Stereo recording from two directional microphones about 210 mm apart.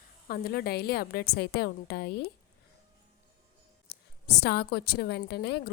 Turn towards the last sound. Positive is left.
turn(degrees=50)  # may be behind; listen again after turning